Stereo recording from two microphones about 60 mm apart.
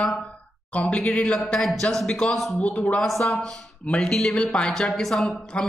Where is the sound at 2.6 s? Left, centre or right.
Left.